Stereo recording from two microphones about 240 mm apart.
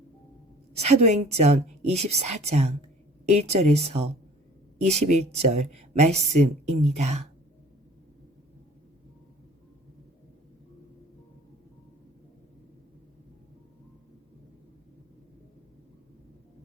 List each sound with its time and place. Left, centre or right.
0.7 s speech: right